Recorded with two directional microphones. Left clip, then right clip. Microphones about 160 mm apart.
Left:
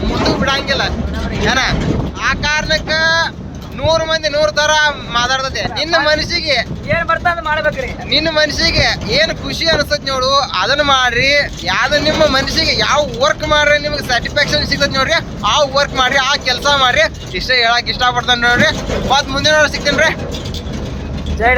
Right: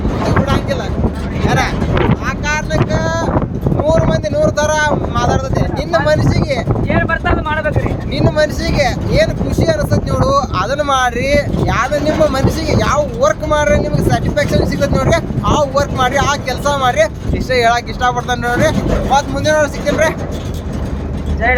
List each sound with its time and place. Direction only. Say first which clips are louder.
0.4 s speech: left 3 dB; 10° right (ahead or behind)
6.8 s speech: left 1 dB; 45° left (ahead or behind)
8.1 s speech: left 2 dB; 10° right (ahead or behind)